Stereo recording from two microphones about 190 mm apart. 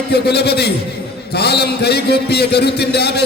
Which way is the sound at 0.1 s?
60° left (ahead or behind).